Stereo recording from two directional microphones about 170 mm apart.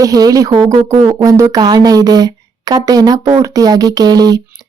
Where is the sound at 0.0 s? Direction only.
20° right (ahead or behind).